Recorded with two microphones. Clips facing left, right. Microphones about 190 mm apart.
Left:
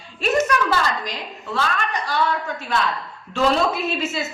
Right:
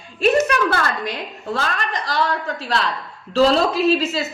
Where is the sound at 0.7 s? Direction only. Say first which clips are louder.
Even; 60° right (ahead or behind).